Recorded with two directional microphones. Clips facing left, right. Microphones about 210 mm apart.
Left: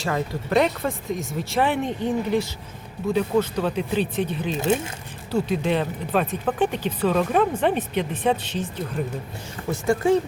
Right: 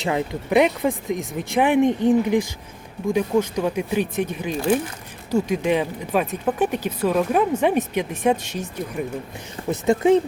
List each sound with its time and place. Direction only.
0.0 s speech: 15° right (ahead or behind)
4.5 s speech: 20° left (ahead or behind)
5.3 s speech: 10° right (ahead or behind)